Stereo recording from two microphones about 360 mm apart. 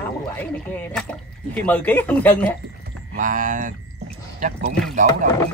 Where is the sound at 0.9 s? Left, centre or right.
Centre.